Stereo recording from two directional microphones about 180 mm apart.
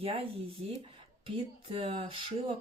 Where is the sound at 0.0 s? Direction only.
30° right (ahead or behind).